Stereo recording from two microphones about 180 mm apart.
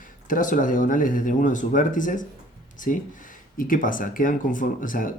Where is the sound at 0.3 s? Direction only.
45° left (ahead or behind).